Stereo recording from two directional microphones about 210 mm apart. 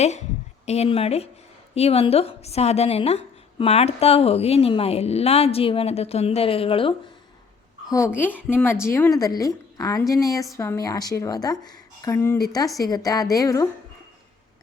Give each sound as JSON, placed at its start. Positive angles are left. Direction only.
{"t": 0.6, "sound": "a woman's voice", "side_deg": 30}
{"t": 7.9, "sound": "a woman's voice", "side_deg": 15}